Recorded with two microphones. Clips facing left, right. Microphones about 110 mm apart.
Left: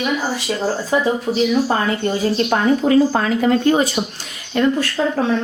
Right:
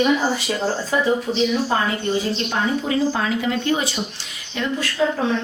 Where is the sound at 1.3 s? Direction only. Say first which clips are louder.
Left 4 dB; 50° left (ahead or behind).